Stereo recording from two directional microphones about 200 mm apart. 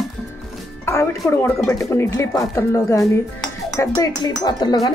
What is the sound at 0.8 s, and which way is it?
Speech, 15° left (ahead or behind).